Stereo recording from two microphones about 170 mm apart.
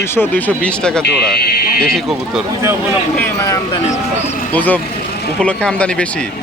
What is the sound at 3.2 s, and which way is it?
Speech, 15° left (ahead or behind).